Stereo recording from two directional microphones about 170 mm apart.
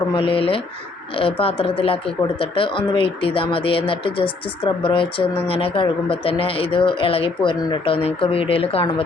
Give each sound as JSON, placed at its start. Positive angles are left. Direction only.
{"t": 0.1, "sound": "speech", "side_deg": 30}